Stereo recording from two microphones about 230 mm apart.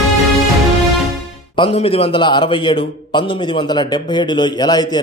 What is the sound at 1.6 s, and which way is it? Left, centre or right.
A man's voice, left.